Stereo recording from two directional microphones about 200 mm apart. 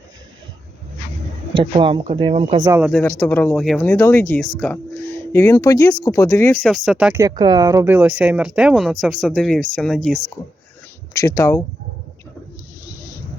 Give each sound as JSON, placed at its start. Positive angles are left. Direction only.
{"t": 1.5, "sound": "speech", "side_deg": -25}
{"t": 2.6, "sound": "speech", "side_deg": -10}
{"t": 2.9, "sound": "speech", "side_deg": 10}
{"t": 7.2, "sound": "speech", "side_deg": -20}
{"t": 11.2, "sound": "speech", "side_deg": 15}